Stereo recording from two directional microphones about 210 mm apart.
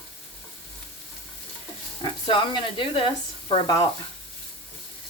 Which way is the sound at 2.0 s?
20° left (ahead or behind).